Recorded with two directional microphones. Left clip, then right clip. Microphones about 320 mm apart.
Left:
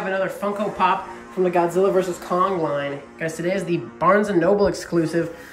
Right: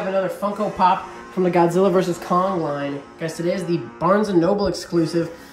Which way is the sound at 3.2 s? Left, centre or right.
Centre.